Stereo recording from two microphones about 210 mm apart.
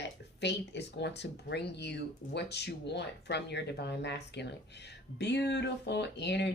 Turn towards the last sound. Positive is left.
turn(degrees=55)  # may be behind; listen again after turning